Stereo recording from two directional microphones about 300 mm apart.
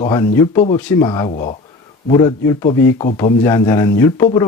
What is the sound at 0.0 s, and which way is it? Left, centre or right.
Speech, centre.